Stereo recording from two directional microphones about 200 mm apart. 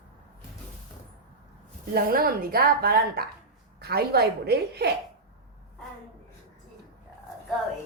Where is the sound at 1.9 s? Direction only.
45° right (ahead or behind).